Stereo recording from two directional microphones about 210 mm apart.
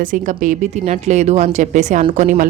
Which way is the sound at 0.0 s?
40° right (ahead or behind).